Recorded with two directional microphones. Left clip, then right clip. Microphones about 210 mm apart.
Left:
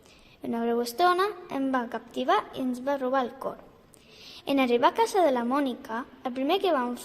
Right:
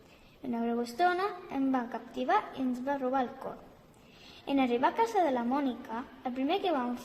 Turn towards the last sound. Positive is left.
turn(degrees=45)  # may be behind; listen again after turning